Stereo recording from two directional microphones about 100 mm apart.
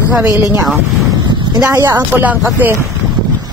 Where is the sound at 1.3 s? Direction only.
45° right (ahead or behind); by 1.9 s 30° right (ahead or behind).